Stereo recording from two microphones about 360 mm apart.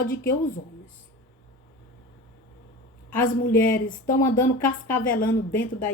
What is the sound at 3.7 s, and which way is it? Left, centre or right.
A woman's voice, left.